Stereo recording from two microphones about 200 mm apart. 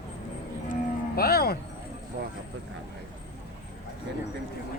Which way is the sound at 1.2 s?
50° left (ahead or behind).